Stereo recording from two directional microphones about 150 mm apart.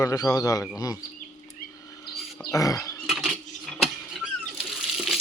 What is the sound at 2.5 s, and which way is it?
Speech, 20° left (ahead or behind).